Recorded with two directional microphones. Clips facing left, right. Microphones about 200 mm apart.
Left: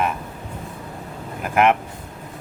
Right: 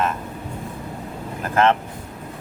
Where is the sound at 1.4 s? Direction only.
15° left (ahead or behind).